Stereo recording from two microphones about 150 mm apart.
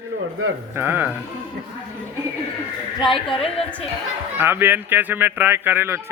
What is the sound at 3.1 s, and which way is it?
Speech, 35° left (ahead or behind).